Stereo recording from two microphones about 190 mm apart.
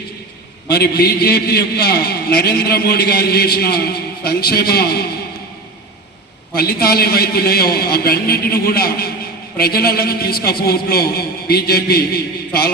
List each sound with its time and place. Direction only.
0.7 s a man's voice: 55° left (ahead or behind)
6.6 s a man's voice: 55° left (ahead or behind)